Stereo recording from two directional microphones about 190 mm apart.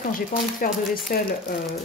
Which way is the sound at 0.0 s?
45° left (ahead or behind).